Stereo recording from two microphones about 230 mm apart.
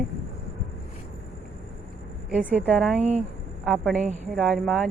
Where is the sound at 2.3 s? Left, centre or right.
Centre.